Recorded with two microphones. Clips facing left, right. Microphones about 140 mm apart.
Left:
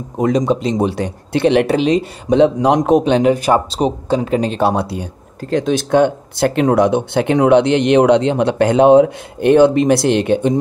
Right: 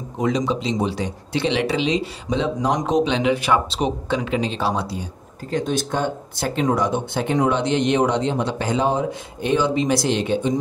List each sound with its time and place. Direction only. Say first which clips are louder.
0.2 s speech: left 6 dB; 50° left (ahead or behind)
5.5 s speech: left 8 dB; 90° left; by 10.6 s 60° left (ahead or behind)